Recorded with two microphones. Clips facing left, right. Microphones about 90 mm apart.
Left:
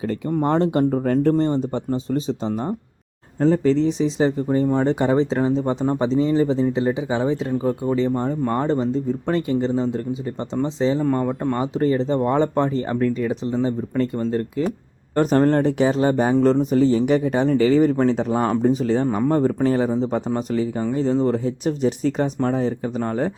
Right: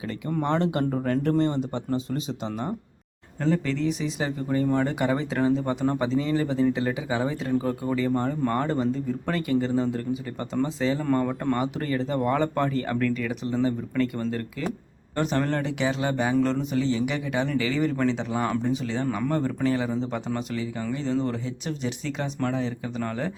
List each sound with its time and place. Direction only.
0.4 s speech: 35° left (ahead or behind)
15.1 s speech: 40° left (ahead or behind)